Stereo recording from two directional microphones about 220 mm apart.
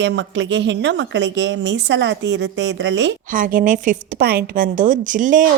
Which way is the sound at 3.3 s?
35° right (ahead or behind).